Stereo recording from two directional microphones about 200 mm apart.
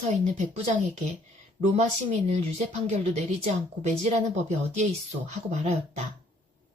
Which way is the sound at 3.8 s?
35° right (ahead or behind).